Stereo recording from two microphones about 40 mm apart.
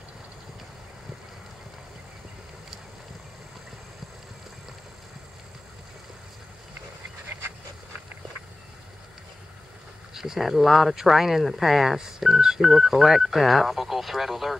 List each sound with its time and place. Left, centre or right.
10.1 s speech: centre